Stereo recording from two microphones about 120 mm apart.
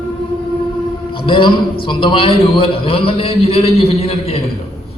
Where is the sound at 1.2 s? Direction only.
45° left (ahead or behind).